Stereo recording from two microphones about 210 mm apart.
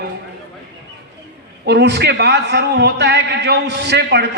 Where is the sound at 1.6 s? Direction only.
55° right (ahead or behind).